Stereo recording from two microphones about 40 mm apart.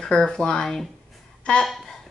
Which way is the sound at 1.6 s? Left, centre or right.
Centre.